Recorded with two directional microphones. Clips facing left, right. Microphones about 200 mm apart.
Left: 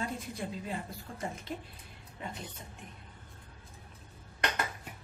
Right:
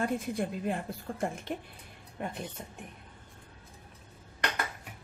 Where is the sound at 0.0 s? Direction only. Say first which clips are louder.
Right 6 dB; 55° right (ahead or behind).